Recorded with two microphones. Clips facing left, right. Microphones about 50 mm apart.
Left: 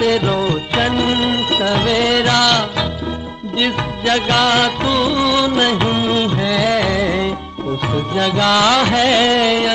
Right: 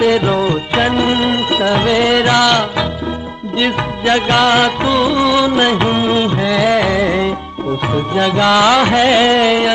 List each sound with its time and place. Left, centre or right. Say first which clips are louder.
0.0 s music: right 3 dB; centre